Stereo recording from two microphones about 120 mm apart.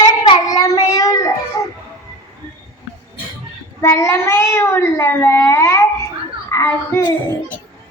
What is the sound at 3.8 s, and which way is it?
A child's voice, 25° left (ahead or behind).